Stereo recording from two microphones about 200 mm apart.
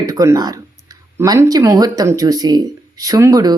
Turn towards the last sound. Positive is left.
turn(degrees=-15)  # may be behind; listen again after turning